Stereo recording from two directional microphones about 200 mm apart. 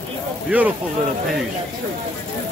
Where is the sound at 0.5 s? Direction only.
5° right (ahead or behind).